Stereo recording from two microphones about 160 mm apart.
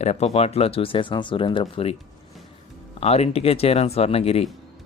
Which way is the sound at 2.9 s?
40° left (ahead or behind).